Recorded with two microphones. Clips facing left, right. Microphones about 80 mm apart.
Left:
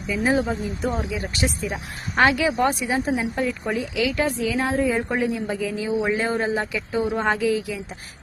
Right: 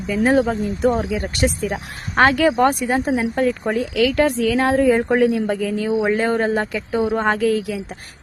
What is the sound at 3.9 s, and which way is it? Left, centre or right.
A woman's voice, right.